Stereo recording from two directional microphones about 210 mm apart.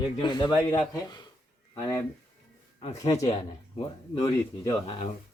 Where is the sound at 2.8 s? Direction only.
35° left (ahead or behind).